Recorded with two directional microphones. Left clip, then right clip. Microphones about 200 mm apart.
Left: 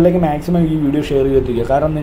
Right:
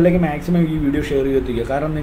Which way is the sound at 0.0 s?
10° left (ahead or behind).